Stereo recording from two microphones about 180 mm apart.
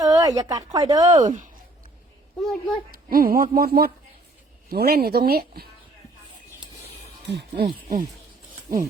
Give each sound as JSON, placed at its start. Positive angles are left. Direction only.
{"t": 0.0, "sound": "speech", "side_deg": -20}
{"t": 2.4, "sound": "a child's voice", "side_deg": 0}
{"t": 2.9, "sound": "speech", "side_deg": -55}
{"t": 7.6, "sound": "speech", "side_deg": -50}